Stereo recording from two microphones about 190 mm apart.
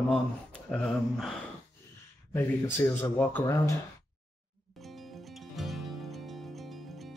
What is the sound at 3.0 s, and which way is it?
Speech, 10° left (ahead or behind).